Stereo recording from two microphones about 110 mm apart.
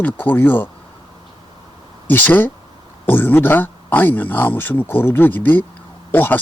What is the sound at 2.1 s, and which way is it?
Speech, 15° left (ahead or behind).